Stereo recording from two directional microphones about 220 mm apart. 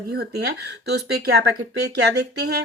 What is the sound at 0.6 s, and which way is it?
Speech, 50° right (ahead or behind).